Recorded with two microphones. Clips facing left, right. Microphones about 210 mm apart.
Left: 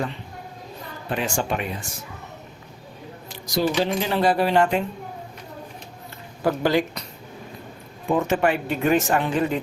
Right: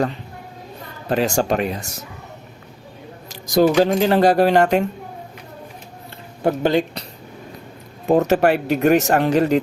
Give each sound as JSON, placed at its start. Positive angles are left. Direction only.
{"t": 1.0, "sound": "speech", "side_deg": -40}
{"t": 3.2, "sound": "speech", "side_deg": -45}
{"t": 6.4, "sound": "speech", "side_deg": -25}
{"t": 8.0, "sound": "speech", "side_deg": -40}
{"t": 8.4, "sound": "speech", "side_deg": -70}
{"t": 9.2, "sound": "speech", "side_deg": -40}